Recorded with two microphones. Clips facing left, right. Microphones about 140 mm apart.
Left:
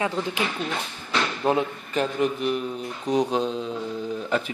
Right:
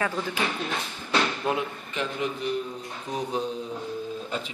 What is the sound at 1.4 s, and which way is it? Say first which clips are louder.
Speech: left 5 dB; 35° left (ahead or behind).